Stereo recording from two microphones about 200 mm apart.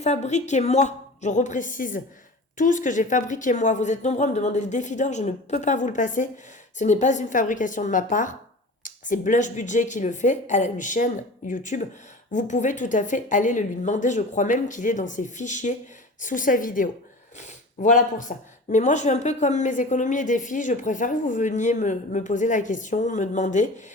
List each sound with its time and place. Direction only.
0.0 s speech: 35° left (ahead or behind)